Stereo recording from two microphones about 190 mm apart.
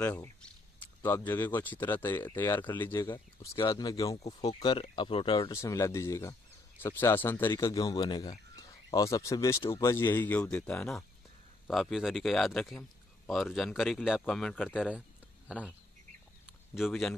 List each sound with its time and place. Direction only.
0.0 s a man's voice: 10° left (ahead or behind); by 5.5 s 30° left (ahead or behind)
5.5 s a man's voice: 15° left (ahead or behind)
14.8 s a sound: 5° right (ahead or behind)
16.7 s speech: centre (ahead or behind)